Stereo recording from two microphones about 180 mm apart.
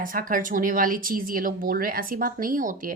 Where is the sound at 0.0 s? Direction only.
50° right (ahead or behind).